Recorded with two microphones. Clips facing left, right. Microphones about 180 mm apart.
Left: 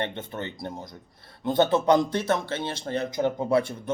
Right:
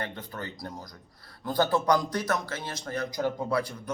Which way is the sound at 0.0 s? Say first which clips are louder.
Left 5 dB; 25° left (ahead or behind).